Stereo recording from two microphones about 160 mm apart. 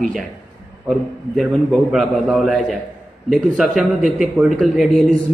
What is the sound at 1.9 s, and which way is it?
A man's voice, centre (ahead or behind).